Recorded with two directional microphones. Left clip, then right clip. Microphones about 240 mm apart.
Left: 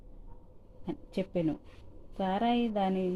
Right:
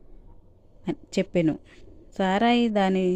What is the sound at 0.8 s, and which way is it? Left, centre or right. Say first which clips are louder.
Speech: right 8 dB; right.